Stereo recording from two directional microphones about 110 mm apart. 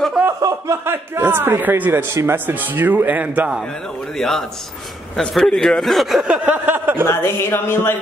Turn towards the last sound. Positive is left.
turn(degrees=20)  # may be behind; listen again after turning